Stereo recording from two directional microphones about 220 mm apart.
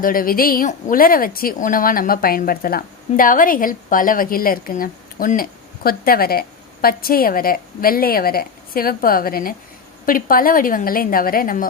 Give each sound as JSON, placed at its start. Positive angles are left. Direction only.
{"t": 0.0, "sound": "speech", "side_deg": 40}